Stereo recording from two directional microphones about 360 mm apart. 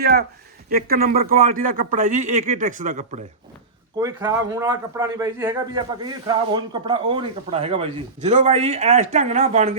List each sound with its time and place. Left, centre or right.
0.0 s speech: right
3.9 s speech: centre